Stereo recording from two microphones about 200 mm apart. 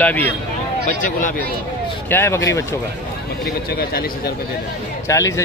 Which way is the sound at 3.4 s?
50° left (ahead or behind).